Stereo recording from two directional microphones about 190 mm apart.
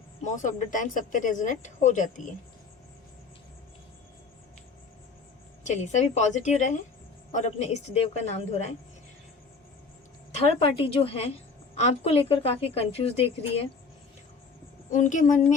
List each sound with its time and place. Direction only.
0.2 s speech: 40° left (ahead or behind)
5.6 s speech: 40° left (ahead or behind)
10.6 s speech: 30° left (ahead or behind)
14.8 s speech: 40° left (ahead or behind)